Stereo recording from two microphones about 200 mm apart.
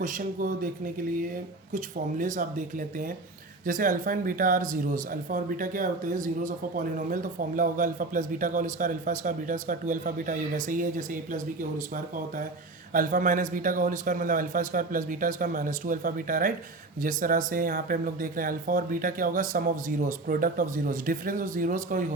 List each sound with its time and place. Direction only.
0.0 s speech: 40° right (ahead or behind)
1.7 s speech: 40° right (ahead or behind)